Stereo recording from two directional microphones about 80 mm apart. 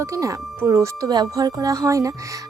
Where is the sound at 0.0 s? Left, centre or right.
Right.